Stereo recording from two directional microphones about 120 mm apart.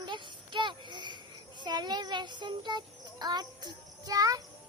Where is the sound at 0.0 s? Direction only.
40° right (ahead or behind).